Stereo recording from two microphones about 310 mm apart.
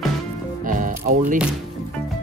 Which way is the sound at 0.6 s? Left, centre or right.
Right.